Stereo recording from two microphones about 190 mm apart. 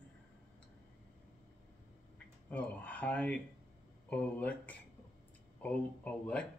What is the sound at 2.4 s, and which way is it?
Speech, 5° left (ahead or behind).